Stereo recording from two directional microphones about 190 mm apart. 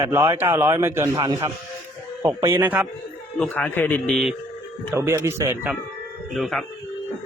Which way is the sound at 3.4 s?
10° left (ahead or behind).